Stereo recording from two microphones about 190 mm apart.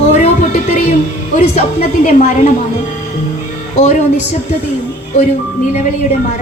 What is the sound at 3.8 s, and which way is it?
Speech, 40° left (ahead or behind).